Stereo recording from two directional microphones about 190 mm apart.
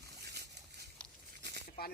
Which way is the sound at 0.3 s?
60° right (ahead or behind).